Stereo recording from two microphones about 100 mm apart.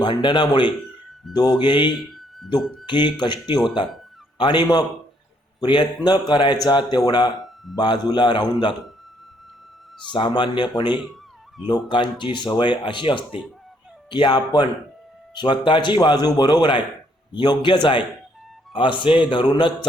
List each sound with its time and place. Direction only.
0.0 s speech: 50° left (ahead or behind)
1.9 s a sound: centre (ahead or behind)
2.6 s speech: centre (ahead or behind)
2.8 s a man's voice: 50° left (ahead or behind)
10.1 s a man's voice: 50° left (ahead or behind)